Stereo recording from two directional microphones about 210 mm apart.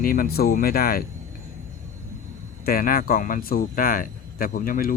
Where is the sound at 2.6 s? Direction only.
45° left (ahead or behind).